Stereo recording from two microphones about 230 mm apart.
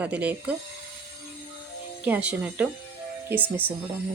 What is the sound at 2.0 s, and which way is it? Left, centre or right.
Speech, centre.